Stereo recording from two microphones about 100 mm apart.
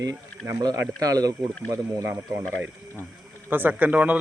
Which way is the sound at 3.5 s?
20° right (ahead or behind).